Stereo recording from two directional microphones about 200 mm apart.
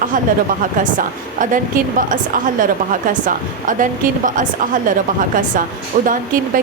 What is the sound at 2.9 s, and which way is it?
A woman's voice, 40° right (ahead or behind).